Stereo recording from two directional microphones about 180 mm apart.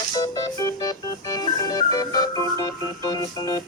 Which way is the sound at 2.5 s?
20° left (ahead or behind).